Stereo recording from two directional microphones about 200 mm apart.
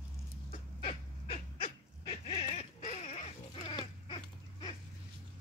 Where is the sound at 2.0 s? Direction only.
25° left (ahead or behind).